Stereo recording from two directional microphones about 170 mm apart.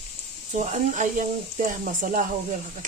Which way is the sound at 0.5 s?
45° right (ahead or behind).